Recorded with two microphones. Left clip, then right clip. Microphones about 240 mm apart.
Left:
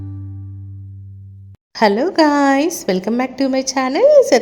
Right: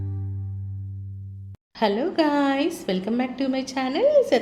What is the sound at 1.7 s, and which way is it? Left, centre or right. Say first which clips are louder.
A woman's voice: left 8 dB; left.